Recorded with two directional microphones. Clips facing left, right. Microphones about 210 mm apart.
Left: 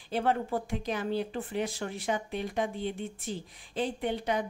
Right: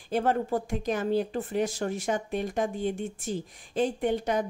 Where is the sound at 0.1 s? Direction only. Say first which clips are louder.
Right 3 dB; 45° right (ahead or behind).